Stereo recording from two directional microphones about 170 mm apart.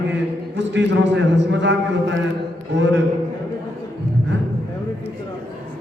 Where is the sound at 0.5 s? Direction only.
90° right.